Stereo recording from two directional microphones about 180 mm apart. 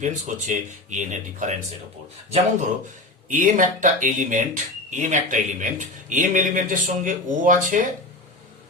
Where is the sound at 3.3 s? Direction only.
45° right (ahead or behind).